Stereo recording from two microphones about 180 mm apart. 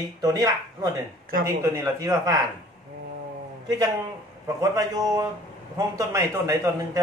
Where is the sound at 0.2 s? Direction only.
20° right (ahead or behind).